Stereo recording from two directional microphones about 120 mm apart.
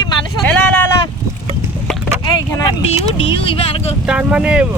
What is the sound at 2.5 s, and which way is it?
Speech, 35° left (ahead or behind).